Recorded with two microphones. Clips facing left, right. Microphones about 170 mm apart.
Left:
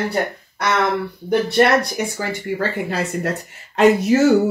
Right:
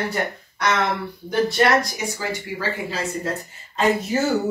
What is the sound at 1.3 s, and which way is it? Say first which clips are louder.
Speech: left 3 dB; 60° left (ahead or behind).